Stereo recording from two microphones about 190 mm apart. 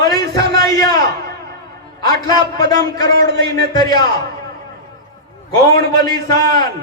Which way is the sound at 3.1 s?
60° right (ahead or behind).